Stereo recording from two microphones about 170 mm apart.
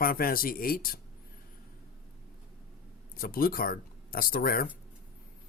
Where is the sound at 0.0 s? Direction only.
60° left (ahead or behind).